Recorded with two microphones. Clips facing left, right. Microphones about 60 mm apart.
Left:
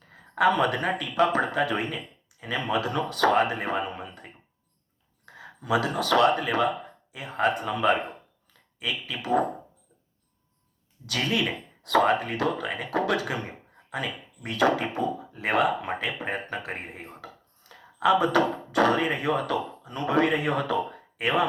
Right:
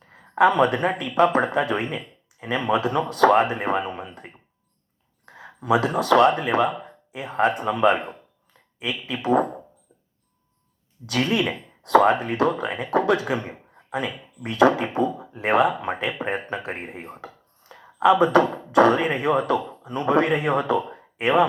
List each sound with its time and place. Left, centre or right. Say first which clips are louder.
0.3 s speech: right 4 dB; right
11.8 s speech: right 5 dB; right
14.5 s speech: right 5 dB; right